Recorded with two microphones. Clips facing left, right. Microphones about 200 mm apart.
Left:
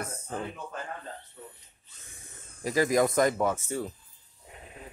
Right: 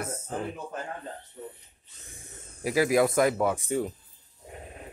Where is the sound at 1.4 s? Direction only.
30° right (ahead or behind).